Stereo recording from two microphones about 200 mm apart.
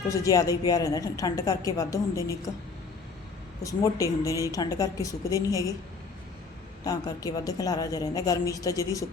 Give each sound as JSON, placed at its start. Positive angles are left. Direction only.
{"t": 0.1, "sound": "a woman's voice", "side_deg": 15}
{"t": 3.6, "sound": "a woman's voice", "side_deg": 15}
{"t": 6.8, "sound": "a woman's voice", "side_deg": 20}